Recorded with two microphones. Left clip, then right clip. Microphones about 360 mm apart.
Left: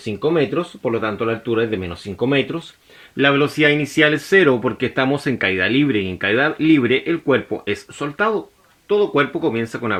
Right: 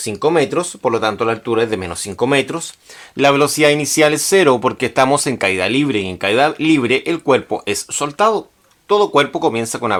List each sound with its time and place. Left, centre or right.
0.0 s speech: right
0.9 s speech: centre
1.8 s speech: right
3.2 s speech: centre